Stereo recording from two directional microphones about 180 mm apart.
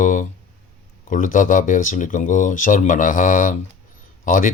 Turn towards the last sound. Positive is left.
turn(degrees=50)  # may be behind; listen again after turning